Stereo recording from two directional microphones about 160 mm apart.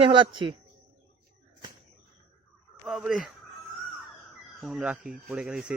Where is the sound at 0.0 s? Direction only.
30° right (ahead or behind).